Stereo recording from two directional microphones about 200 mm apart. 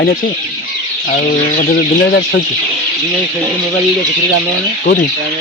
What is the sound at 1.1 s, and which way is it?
Speech, 45° left (ahead or behind).